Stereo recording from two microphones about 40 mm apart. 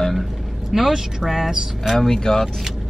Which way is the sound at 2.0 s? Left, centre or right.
Centre.